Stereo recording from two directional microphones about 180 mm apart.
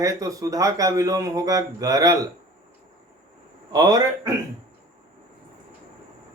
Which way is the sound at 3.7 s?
20° right (ahead or behind).